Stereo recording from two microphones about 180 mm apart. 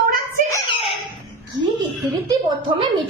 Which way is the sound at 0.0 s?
50° right (ahead or behind).